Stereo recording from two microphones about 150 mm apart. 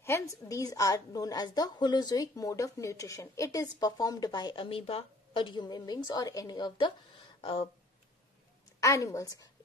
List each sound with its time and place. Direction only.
0.0 s a woman's voice: 20° left (ahead or behind); by 7.7 s 40° left (ahead or behind)
8.8 s a woman's voice: 20° left (ahead or behind)